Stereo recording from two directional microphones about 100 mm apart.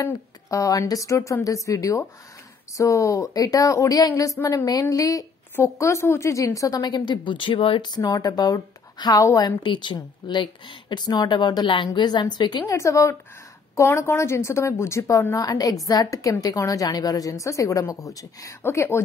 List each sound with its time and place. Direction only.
0.0 s a woman's voice: 30° left (ahead or behind); by 7.9 s 65° left (ahead or behind)
7.9 s a woman's voice: 40° left (ahead or behind)
9.2 s a woman's voice: 30° left (ahead or behind)
9.6 s speech: 55° left (ahead or behind)
12.6 s a woman's voice: 30° left (ahead or behind)